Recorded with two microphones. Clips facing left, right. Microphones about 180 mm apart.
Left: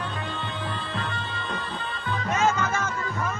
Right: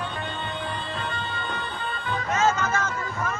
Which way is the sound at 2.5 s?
10° left (ahead or behind).